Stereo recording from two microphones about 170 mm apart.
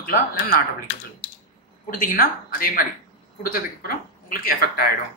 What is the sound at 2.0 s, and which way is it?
Speech, 55° left (ahead or behind).